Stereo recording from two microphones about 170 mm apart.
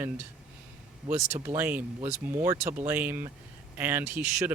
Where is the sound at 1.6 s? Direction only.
10° right (ahead or behind).